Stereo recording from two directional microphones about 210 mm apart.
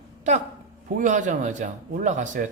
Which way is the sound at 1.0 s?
35° right (ahead or behind).